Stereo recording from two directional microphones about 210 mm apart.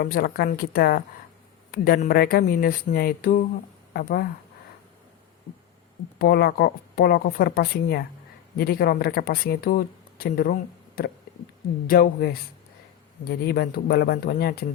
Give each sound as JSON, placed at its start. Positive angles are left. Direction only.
{"t": 0.0, "sound": "speech", "side_deg": 45}
{"t": 6.1, "sound": "speech", "side_deg": 45}